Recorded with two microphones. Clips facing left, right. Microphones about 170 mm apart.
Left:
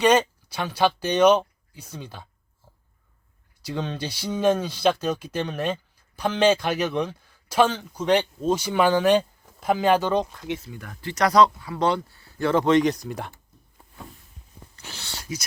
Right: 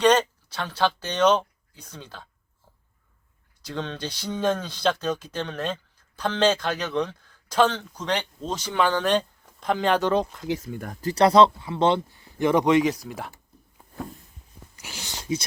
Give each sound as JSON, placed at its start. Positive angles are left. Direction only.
{"t": 0.0, "sound": "speech", "side_deg": 10}
{"t": 3.6, "sound": "speech", "side_deg": 10}
{"t": 10.6, "sound": "speech", "side_deg": -45}
{"t": 14.8, "sound": "whispering", "side_deg": -15}